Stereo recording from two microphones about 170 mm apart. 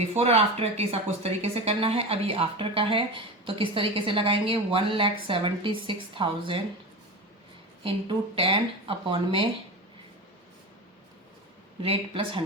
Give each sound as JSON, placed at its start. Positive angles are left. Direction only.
{"t": 0.1, "sound": "speech", "side_deg": -40}
{"t": 7.9, "sound": "speech", "side_deg": -30}
{"t": 11.8, "sound": "speech", "side_deg": -35}